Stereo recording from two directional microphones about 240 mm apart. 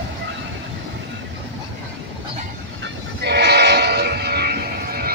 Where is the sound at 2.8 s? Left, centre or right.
Right.